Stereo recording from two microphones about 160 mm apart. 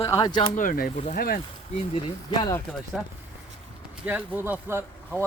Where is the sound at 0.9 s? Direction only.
45° left (ahead or behind).